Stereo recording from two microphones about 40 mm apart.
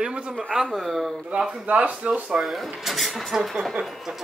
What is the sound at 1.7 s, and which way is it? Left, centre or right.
Speech, right.